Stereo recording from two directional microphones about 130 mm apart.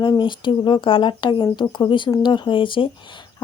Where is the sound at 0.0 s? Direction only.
35° left (ahead or behind).